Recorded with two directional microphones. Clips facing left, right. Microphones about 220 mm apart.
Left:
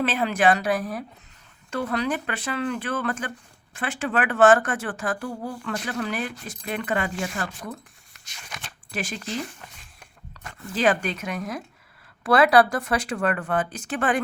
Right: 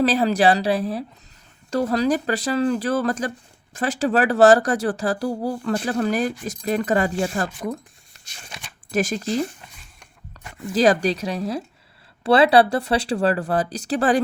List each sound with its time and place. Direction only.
0.0 s speech: 35° right (ahead or behind)
8.1 s shuffling cards: 30° right (ahead or behind)
8.9 s speech: 40° right (ahead or behind)
10.8 s speech: 35° right (ahead or behind)